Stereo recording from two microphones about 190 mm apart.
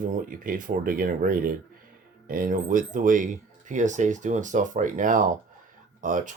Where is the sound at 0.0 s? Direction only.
45° right (ahead or behind).